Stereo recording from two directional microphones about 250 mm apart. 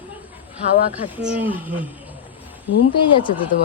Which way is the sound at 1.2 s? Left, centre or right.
Centre.